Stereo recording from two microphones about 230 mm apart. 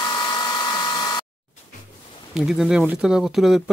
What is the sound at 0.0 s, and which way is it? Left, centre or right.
Hair dryer, centre.